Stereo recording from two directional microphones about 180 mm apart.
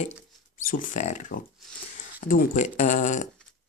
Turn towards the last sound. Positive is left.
turn(degrees=45)  # may be behind; listen again after turning